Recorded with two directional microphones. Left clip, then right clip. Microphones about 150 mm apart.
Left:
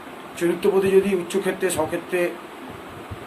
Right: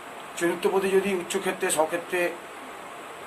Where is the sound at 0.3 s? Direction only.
10° right (ahead or behind).